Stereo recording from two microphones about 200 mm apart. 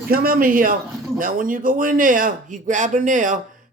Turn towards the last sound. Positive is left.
turn(degrees=-40)  # may be behind; listen again after turning